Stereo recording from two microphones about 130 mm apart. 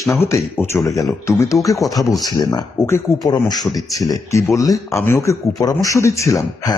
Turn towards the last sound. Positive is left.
turn(degrees=25)  # may be behind; listen again after turning